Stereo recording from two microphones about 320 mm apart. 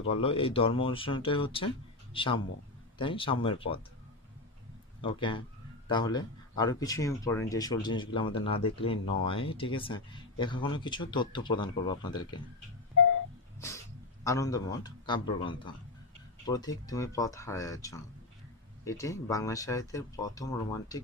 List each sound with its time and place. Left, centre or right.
0.1 s speech: centre
5.0 s speech: centre
14.2 s speech: centre